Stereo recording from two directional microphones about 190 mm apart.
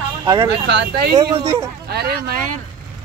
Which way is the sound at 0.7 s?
60° right (ahead or behind).